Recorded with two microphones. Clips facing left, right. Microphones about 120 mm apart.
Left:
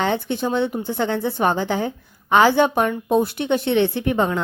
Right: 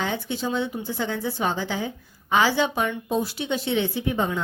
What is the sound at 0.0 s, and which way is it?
Speech, 60° left (ahead or behind).